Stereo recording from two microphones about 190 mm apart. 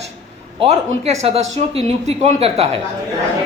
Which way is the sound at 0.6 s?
35° right (ahead or behind).